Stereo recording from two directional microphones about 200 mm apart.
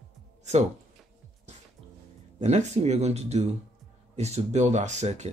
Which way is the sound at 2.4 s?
35° right (ahead or behind).